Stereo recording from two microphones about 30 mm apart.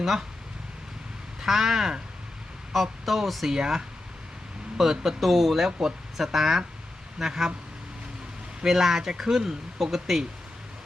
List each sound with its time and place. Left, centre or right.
1.4 s speech: centre
3.4 s speech: centre
4.8 s speech: centre
8.6 s speech: centre
9.7 s speech: centre